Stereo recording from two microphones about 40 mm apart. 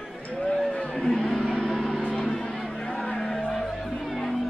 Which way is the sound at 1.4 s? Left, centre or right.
Left.